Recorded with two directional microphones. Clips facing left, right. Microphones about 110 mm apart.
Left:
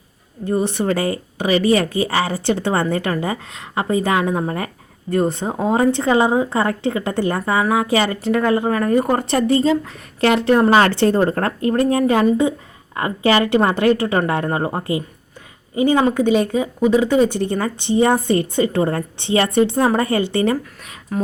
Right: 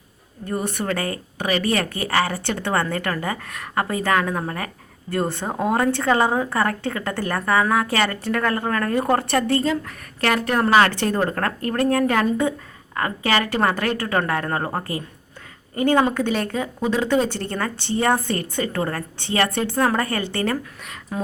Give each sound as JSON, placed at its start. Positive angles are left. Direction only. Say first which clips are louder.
{"t": 0.4, "sound": "speech", "louder": "left 6 dB", "side_deg": 25}
{"t": 1.8, "sound": "speech", "louder": "left 7 dB", "side_deg": -65}
{"t": 2.0, "sound": "speech", "louder": "left 3 dB", "side_deg": 25}
{"t": 9.2, "sound": "speech", "louder": "left 4 dB", "side_deg": 20}